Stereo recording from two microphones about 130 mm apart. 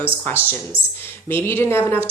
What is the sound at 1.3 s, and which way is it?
Speech, 20° left (ahead or behind).